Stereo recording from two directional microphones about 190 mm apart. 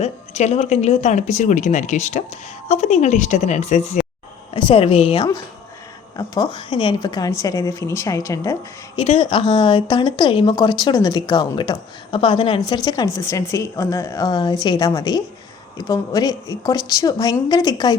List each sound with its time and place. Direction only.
0.0 s speech: 35° left (ahead or behind); by 8.5 s 15° left (ahead or behind)
9.0 s a woman's voice: 30° left (ahead or behind)